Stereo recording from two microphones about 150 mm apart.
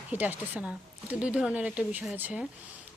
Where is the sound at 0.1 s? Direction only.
10° right (ahead or behind).